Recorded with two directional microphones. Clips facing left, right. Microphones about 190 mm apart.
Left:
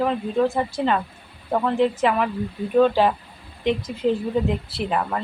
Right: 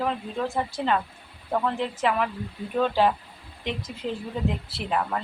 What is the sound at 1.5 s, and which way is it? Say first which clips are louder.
Speech: left 6 dB; 5° left (ahead or behind).